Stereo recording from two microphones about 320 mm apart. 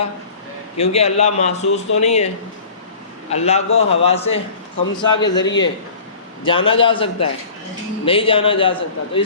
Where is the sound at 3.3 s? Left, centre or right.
Centre.